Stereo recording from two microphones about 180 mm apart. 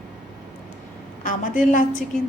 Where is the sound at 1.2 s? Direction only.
45° left (ahead or behind).